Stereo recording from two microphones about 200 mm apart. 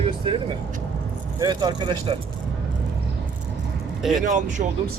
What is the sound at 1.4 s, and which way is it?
Speech, 20° right (ahead or behind).